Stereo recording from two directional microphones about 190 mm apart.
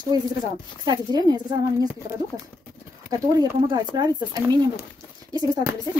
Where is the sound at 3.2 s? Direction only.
15° right (ahead or behind).